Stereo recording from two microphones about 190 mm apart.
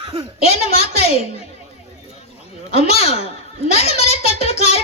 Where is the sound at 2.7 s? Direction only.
30° left (ahead or behind).